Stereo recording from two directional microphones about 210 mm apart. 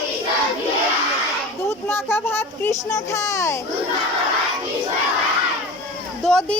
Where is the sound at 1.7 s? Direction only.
10° left (ahead or behind).